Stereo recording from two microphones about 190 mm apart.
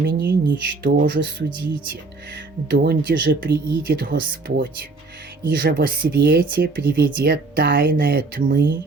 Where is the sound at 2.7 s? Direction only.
55° right (ahead or behind).